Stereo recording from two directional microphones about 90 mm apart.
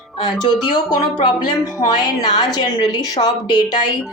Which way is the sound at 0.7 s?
55° left (ahead or behind).